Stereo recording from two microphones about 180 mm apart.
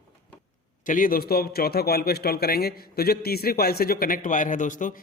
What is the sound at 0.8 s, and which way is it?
A man's voice, 50° left (ahead or behind).